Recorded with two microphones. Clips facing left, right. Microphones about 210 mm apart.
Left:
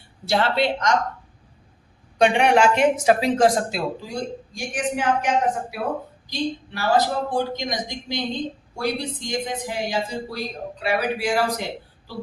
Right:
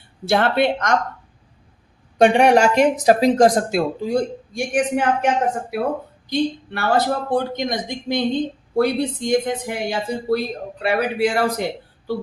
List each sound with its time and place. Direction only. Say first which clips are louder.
0.3 s speech: right 4 dB; 55° right (ahead or behind)
2.1 s speech: right 4 dB; 45° right (ahead or behind)
6.3 s speech: right 5 dB; 55° right (ahead or behind)